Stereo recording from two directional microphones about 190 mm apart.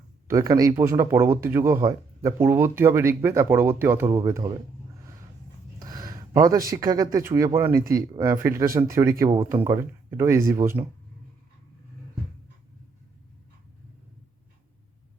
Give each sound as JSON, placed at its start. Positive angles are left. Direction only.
{"t": 0.3, "sound": "speech", "side_deg": -20}
{"t": 5.8, "sound": "speech", "side_deg": -20}